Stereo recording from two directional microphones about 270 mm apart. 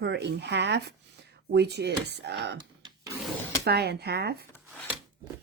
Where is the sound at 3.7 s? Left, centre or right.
Right.